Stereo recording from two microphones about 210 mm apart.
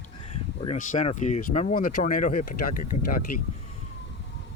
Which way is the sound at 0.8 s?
35° left (ahead or behind).